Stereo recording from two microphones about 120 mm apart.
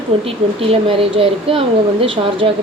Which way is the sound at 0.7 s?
50° right (ahead or behind).